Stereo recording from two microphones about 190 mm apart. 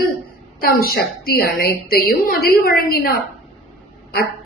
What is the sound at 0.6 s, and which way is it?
A woman's voice, 50° left (ahead or behind).